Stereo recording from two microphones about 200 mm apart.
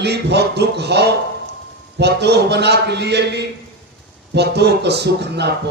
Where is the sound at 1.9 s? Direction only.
55° right (ahead or behind).